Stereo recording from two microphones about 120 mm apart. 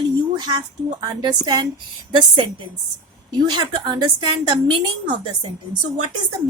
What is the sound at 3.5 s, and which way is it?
Speech, 40° right (ahead or behind).